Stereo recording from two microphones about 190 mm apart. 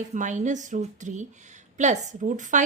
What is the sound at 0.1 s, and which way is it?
A woman's voice, 40° right (ahead or behind).